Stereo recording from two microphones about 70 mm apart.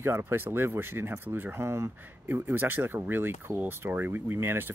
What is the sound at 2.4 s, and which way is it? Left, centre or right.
Speech, right.